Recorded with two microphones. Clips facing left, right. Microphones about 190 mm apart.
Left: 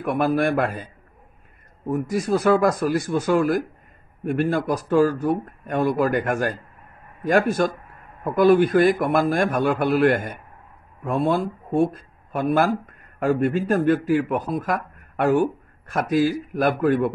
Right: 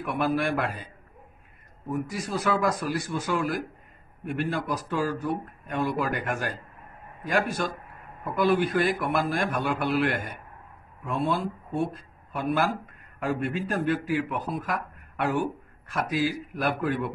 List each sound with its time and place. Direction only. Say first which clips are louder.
0.0 s speech: left 6 dB; 45° left (ahead or behind)
1.9 s speech: left 8 dB; 45° left (ahead or behind)